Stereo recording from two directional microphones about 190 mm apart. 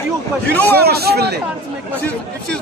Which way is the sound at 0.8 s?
55° right (ahead or behind).